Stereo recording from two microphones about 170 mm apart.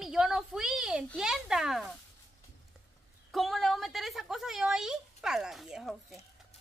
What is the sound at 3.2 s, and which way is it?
A woman's voice, centre (ahead or behind).